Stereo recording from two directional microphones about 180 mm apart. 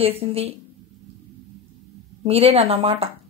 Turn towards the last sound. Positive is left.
turn(degrees=-30)  # may be behind; listen again after turning